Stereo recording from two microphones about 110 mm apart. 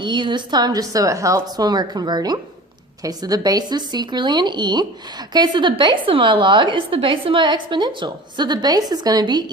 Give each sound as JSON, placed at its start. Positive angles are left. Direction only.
{"t": 0.0, "sound": "a woman's voice", "side_deg": -45}